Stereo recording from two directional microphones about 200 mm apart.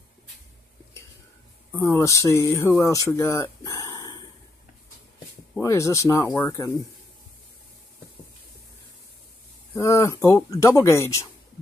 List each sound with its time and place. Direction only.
1.7 s speech: 10° left (ahead or behind)
5.5 s speech: 15° left (ahead or behind)
9.8 s speech: 15° left (ahead or behind)